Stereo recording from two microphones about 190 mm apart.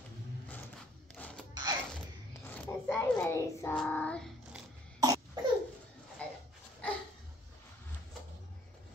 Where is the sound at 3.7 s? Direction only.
5° left (ahead or behind).